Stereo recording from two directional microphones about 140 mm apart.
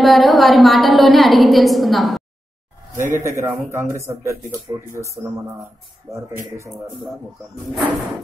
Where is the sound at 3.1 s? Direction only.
20° right (ahead or behind).